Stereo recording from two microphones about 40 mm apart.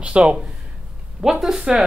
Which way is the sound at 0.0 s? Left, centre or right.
Right.